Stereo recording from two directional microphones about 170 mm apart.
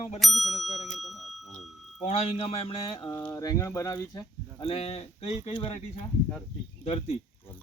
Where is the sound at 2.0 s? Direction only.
35° left (ahead or behind).